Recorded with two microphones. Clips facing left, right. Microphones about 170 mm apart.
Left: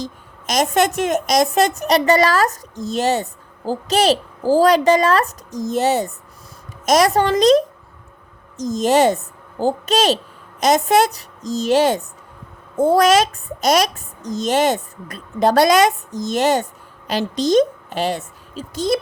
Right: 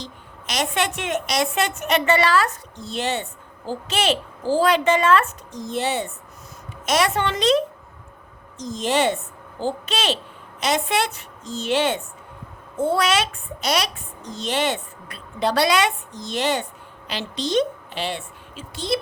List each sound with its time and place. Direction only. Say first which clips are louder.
0.0 s a woman's voice: left 7 dB; 45° left (ahead or behind)